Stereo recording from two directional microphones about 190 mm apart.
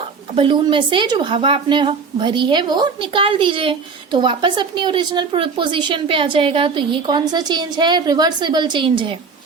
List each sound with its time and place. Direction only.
0.3 s speech: 25° right (ahead or behind)